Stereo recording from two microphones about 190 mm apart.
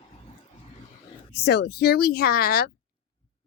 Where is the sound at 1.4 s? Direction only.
60° left (ahead or behind).